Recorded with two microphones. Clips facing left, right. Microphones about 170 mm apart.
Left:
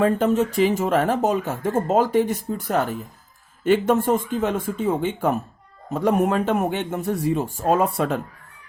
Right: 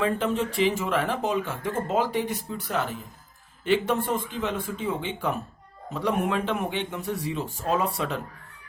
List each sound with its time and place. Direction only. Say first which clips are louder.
0.0 s speech: left 6 dB; 45° left (ahead or behind)